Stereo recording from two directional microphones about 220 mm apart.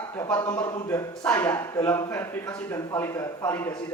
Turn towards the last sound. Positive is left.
turn(degrees=10)  # may be behind; listen again after turning